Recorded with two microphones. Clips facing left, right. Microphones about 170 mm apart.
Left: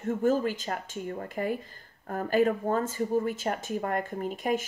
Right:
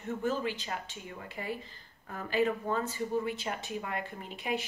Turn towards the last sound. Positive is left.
turn(degrees=45)  # may be behind; listen again after turning